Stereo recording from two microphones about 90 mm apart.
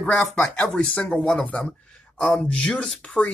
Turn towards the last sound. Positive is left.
turn(degrees=10)  # may be behind; listen again after turning